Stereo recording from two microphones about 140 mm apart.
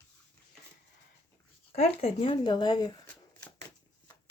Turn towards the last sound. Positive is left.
turn(degrees=30)  # may be behind; listen again after turning